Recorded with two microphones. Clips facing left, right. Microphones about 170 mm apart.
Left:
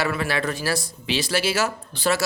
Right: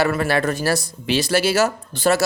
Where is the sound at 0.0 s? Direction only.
45° right (ahead or behind).